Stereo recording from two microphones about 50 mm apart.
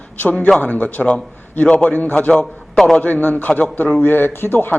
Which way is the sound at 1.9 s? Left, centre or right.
Left.